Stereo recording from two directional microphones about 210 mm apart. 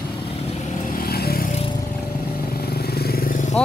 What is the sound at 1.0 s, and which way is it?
Vehicle, 45° left (ahead or behind).